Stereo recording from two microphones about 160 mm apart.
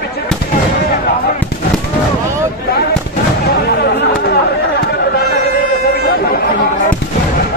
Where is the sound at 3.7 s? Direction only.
85° left.